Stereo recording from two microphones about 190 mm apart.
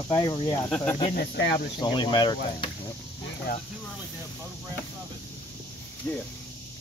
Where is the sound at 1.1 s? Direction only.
60° left (ahead or behind).